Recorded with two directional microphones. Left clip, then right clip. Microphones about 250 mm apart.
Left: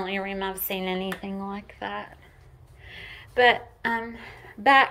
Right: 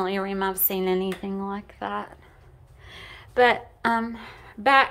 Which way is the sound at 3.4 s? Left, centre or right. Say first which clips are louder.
Even; centre.